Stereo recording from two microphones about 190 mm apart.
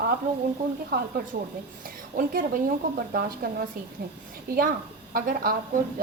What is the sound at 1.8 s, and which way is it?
A woman's voice, 45° right (ahead or behind).